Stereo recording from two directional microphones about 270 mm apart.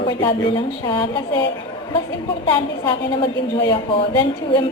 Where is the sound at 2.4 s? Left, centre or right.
Centre.